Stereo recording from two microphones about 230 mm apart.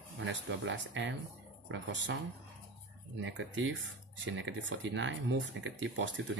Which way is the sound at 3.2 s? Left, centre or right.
Right.